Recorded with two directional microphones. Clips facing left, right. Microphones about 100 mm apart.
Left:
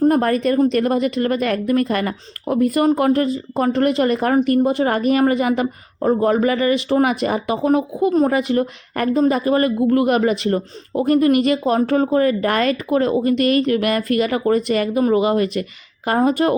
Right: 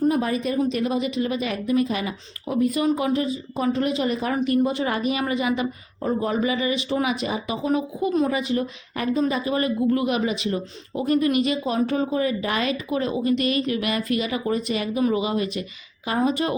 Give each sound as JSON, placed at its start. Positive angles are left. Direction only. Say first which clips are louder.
{"t": 0.0, "sound": "a woman's voice", "louder": "left 6 dB", "side_deg": 60}